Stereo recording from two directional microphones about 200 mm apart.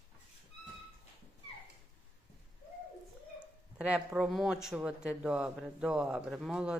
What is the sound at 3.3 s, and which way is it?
A man's voice, 5° right (ahead or behind).